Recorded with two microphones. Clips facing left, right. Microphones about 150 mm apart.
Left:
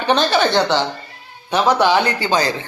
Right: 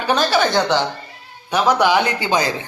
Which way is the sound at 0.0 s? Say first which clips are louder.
Left 1 dB; 10° right (ahead or behind).